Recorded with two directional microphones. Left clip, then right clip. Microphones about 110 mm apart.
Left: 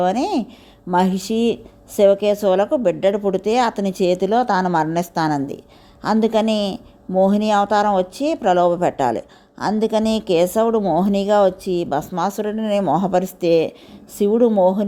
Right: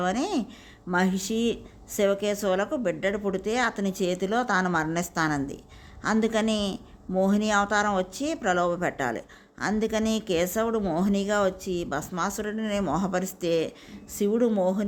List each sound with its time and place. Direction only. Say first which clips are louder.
0.0 s a woman's voice: left 8 dB; 40° left (ahead or behind)